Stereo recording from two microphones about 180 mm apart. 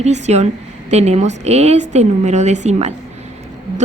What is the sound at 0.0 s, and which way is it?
A woman's voice, 40° right (ahead or behind).